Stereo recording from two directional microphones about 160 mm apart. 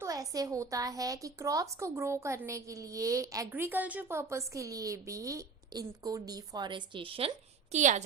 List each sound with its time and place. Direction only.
0.0 s a woman's voice: 20° right (ahead or behind); by 8.0 s 50° right (ahead or behind)